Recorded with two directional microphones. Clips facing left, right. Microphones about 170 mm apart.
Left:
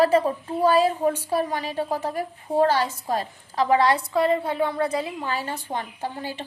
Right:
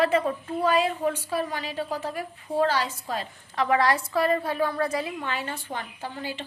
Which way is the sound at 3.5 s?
30° left (ahead or behind).